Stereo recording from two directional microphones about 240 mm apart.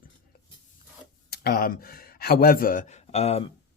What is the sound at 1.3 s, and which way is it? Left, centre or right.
Speech, left.